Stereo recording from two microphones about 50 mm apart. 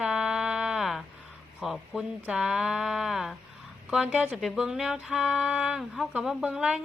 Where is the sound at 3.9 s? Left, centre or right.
Centre.